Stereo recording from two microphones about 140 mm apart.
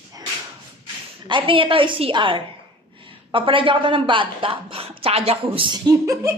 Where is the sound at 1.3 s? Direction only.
40° right (ahead or behind).